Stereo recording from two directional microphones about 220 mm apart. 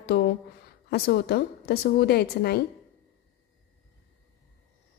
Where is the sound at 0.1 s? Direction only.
50° left (ahead or behind).